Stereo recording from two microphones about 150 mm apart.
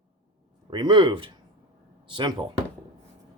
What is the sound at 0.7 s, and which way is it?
Speech, 30° right (ahead or behind).